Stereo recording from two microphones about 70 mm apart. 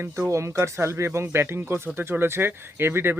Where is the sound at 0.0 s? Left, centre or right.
Right.